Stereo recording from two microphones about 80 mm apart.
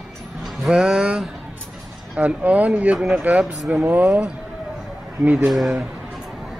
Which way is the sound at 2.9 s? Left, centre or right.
Centre.